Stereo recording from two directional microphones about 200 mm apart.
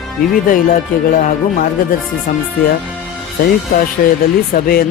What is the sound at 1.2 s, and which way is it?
Speech, 40° left (ahead or behind).